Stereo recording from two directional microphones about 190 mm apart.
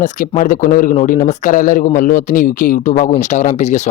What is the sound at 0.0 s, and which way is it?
Speech, 40° left (ahead or behind).